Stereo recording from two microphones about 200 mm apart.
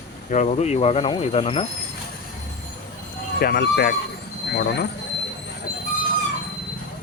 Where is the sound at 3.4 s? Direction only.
50° left (ahead or behind).